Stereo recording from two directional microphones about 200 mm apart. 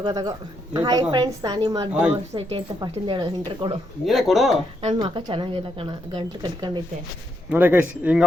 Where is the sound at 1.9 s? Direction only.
5° right (ahead or behind).